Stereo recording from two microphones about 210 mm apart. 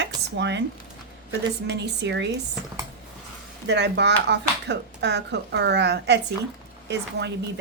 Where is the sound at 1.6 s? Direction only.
55° right (ahead or behind).